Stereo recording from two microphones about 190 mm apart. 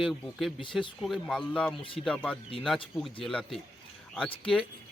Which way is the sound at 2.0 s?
5° left (ahead or behind).